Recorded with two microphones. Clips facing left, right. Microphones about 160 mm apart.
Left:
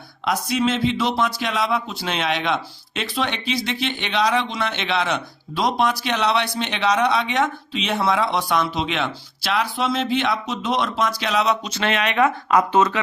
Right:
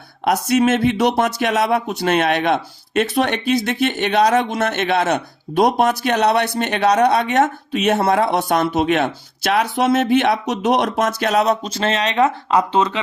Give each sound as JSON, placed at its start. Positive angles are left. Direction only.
{"t": 0.3, "sound": "speech", "side_deg": -60}